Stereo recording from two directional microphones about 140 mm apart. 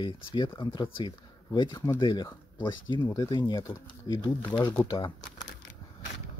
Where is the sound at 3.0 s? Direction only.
30° left (ahead or behind).